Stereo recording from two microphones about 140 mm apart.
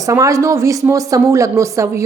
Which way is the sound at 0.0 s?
20° right (ahead or behind).